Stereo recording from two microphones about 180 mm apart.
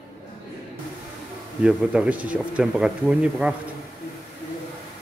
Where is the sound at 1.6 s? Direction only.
5° right (ahead or behind).